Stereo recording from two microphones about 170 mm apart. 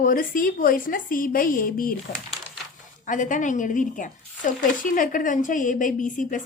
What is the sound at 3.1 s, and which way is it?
Speech, 50° left (ahead or behind).